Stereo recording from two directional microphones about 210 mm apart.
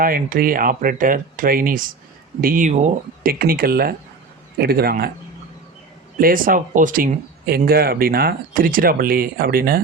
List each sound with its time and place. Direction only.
0.0 s speech: 45° right (ahead or behind)
6.1 s speech: 40° right (ahead or behind)